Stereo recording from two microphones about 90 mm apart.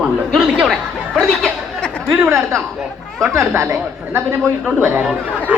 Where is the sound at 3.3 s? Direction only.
30° right (ahead or behind).